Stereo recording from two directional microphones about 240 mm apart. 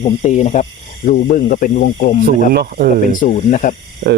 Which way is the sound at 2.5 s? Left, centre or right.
Right.